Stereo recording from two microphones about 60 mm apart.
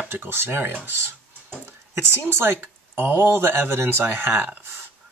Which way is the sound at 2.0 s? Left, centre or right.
Right.